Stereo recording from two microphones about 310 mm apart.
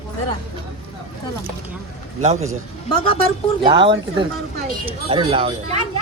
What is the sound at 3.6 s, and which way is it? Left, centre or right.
Speech, centre.